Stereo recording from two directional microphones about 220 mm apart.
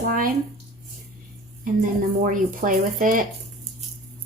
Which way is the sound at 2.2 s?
35° right (ahead or behind).